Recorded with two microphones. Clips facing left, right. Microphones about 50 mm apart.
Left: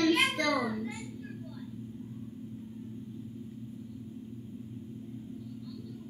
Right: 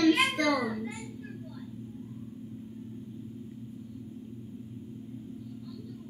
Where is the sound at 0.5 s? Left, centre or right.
Centre.